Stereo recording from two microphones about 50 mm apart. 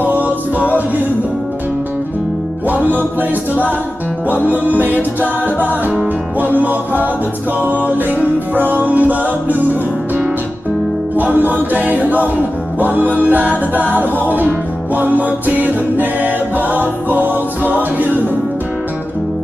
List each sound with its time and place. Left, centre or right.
0.0 s music: right
3.2 s music: right
11.3 s music: right
15.0 s a capella: right